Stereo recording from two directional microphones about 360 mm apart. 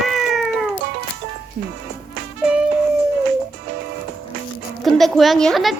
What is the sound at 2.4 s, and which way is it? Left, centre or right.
Music, centre.